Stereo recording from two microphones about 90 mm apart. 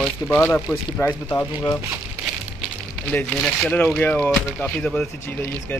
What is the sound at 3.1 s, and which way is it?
Speech, 5° left (ahead or behind).